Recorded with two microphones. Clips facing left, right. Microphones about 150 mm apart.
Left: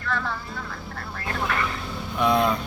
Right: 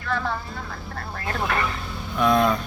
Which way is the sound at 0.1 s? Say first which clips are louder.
Right 3 dB; 20° right (ahead or behind).